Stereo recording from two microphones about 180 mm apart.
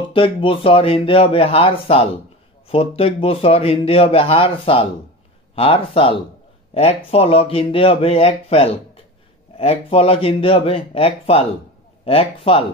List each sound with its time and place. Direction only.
0.1 s speech: 30° left (ahead or behind)